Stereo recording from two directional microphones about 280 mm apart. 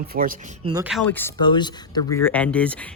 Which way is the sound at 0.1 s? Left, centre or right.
Right.